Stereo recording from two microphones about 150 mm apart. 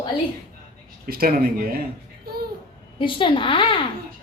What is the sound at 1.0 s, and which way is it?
Speech, 90° right.